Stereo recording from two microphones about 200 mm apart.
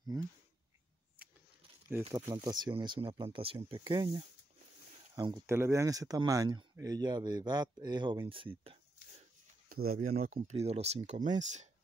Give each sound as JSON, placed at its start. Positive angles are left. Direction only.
{"t": 2.0, "sound": "speech", "side_deg": -20}
{"t": 9.7, "sound": "speech", "side_deg": -45}